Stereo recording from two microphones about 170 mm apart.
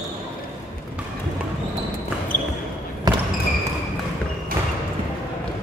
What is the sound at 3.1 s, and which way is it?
Basketball bounce, 25° right (ahead or behind).